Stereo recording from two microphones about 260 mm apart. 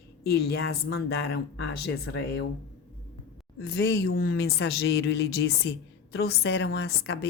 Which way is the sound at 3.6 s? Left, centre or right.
Left.